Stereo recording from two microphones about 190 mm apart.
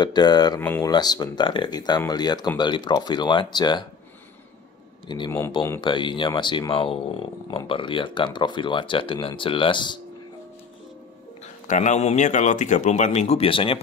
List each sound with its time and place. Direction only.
0.0 s speech: 20° left (ahead or behind)
0.6 s speech: 10° left (ahead or behind)
5.0 s speech: 25° left (ahead or behind)
11.4 s speech: 40° left (ahead or behind)